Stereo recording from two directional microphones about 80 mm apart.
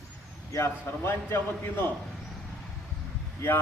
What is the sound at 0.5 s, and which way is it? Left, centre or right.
A man's voice, left.